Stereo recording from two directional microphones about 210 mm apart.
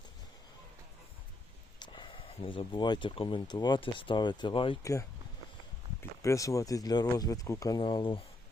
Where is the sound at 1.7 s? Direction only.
20° left (ahead or behind).